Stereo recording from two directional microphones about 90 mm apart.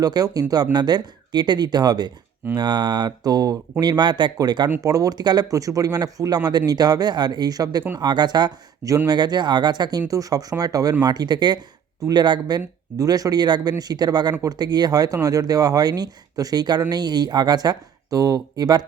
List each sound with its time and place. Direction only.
0.0 s speech: 45° right (ahead or behind)
10.1 s speech: 40° right (ahead or behind)